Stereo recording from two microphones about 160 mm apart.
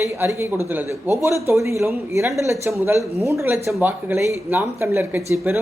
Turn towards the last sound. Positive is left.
turn(degrees=-15)  # may be behind; listen again after turning